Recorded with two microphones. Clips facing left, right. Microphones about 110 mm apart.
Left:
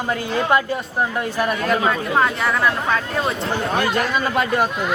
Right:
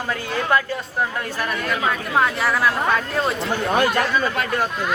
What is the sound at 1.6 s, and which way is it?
Speech, 35° left (ahead or behind).